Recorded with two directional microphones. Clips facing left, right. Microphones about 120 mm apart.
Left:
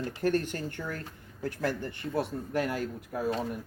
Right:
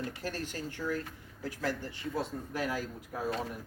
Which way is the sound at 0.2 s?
55° left (ahead or behind).